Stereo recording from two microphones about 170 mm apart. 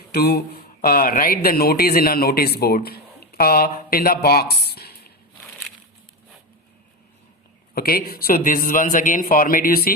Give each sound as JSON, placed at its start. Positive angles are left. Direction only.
{"t": 0.1, "sound": "speech", "side_deg": 70}
{"t": 7.8, "sound": "speech", "side_deg": 60}